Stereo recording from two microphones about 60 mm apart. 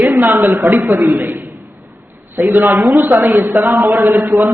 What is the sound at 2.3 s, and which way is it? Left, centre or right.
A man's voice, right.